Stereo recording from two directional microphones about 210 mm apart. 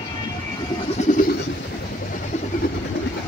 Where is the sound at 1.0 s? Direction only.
35° left (ahead or behind).